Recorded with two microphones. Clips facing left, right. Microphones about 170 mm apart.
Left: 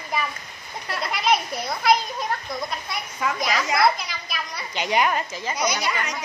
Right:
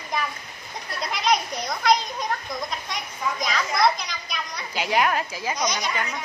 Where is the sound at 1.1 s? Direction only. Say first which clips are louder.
Even; 5° left (ahead or behind).